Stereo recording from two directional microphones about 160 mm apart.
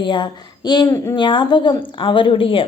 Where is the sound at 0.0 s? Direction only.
30° left (ahead or behind).